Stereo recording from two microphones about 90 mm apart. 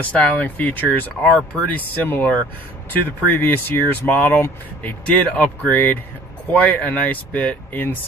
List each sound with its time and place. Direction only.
0.0 s speech: 15° left (ahead or behind)